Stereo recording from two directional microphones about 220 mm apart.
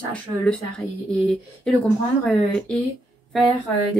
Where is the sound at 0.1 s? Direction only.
5° left (ahead or behind).